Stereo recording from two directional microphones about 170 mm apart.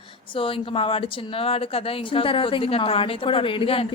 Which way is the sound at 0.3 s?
30° left (ahead or behind).